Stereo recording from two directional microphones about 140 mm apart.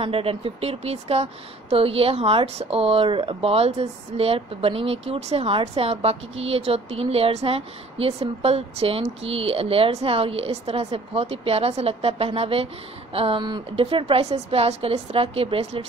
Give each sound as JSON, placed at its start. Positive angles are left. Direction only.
{"t": 0.0, "sound": "speech", "side_deg": -40}